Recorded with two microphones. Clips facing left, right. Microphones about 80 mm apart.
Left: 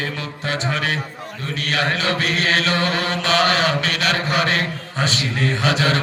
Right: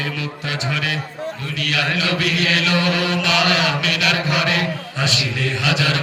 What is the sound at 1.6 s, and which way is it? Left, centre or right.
Chant, left.